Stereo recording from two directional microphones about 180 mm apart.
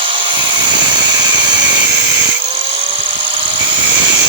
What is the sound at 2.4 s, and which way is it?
Helicopter, 30° right (ahead or behind).